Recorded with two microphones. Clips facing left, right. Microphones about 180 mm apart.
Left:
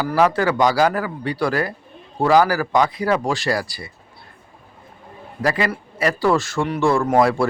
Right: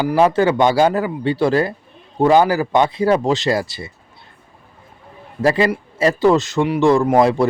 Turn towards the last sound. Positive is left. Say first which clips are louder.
# right 3 dB
turn(degrees=-20)  # may be behind; listen again after turning